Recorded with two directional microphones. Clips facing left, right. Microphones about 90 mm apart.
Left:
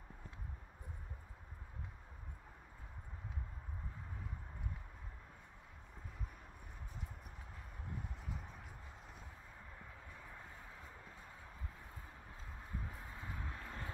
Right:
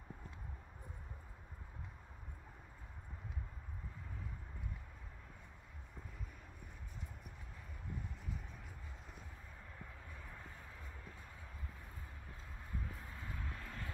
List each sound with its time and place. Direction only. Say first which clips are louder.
13.1 s vehicle: left 1 dB; 15° left (ahead or behind)